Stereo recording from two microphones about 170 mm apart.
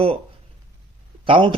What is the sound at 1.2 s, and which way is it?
Speech, 30° right (ahead or behind).